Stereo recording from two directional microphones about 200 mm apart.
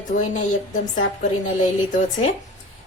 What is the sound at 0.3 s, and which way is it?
Speech, 40° left (ahead or behind).